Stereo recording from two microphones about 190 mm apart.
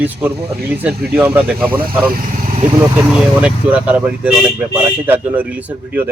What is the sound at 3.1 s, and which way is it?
Speech, 5° right (ahead or behind).